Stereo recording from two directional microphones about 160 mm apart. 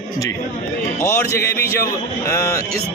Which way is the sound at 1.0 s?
15° left (ahead or behind).